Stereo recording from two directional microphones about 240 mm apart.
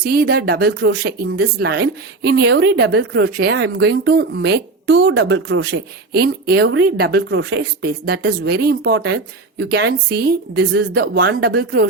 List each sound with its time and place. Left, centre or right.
0.0 s speech: right